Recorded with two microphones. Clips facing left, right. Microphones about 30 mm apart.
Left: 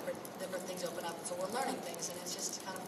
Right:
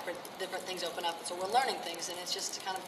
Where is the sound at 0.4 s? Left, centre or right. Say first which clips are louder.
Right 3 dB; right.